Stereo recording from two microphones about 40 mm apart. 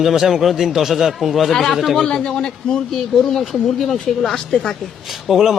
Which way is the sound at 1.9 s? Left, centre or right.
Centre.